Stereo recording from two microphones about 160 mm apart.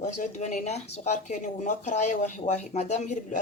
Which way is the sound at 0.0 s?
50° left (ahead or behind).